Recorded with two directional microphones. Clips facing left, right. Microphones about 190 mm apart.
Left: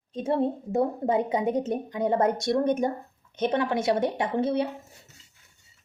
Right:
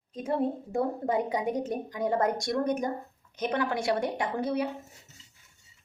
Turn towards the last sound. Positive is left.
turn(degrees=25)  # may be behind; listen again after turning